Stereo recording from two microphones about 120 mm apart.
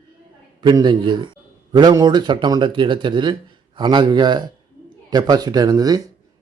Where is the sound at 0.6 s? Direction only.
35° right (ahead or behind).